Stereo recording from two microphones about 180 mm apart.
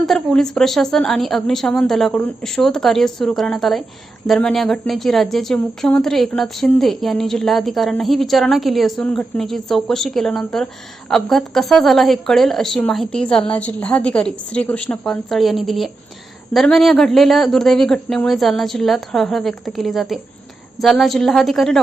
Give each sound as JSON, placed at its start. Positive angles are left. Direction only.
{"t": 0.0, "sound": "a woman's voice", "side_deg": 0}